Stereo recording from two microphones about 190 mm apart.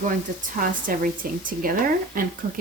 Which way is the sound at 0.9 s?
45° right (ahead or behind).